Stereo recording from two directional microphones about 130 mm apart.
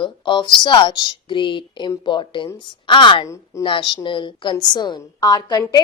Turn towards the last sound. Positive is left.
turn(degrees=30)  # may be behind; listen again after turning